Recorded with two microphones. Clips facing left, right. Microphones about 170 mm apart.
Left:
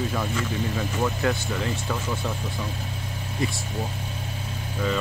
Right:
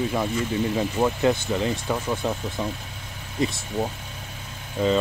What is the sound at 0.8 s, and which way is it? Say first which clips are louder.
Speech: right 4 dB; 20° right (ahead or behind).